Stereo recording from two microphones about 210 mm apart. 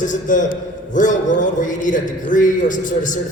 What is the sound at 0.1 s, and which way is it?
A man's voice, 40° left (ahead or behind).